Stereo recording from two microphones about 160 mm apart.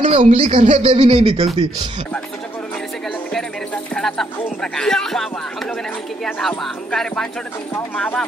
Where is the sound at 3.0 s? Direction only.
5° left (ahead or behind).